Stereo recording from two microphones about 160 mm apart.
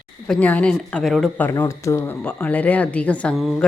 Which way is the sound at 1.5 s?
15° left (ahead or behind).